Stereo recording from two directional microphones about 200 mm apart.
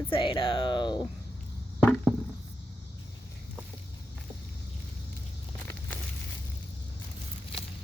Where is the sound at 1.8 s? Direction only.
10° left (ahead or behind).